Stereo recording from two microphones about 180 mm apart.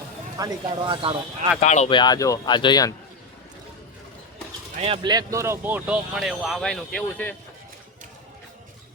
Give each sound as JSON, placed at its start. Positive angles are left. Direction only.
{"t": 0.3, "sound": "speech", "side_deg": -20}
{"t": 1.6, "sound": "speech", "side_deg": 40}
{"t": 1.9, "sound": "speech", "side_deg": 25}
{"t": 4.8, "sound": "speech", "side_deg": -30}